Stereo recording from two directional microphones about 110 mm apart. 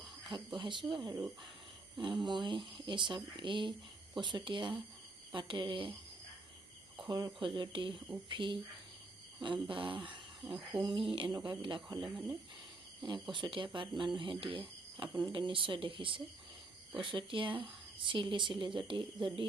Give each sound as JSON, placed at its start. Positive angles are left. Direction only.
{"t": 0.3, "sound": "speech", "side_deg": -45}
{"t": 2.2, "sound": "speech", "side_deg": -45}
{"t": 7.1, "sound": "speech", "side_deg": -35}
{"t": 7.4, "sound": "speech", "side_deg": -45}
{"t": 11.3, "sound": "speech", "side_deg": -35}
{"t": 11.6, "sound": "speech", "side_deg": -45}
{"t": 11.9, "sound": "speech", "side_deg": 0}
{"t": 13.0, "sound": "speech", "side_deg": -45}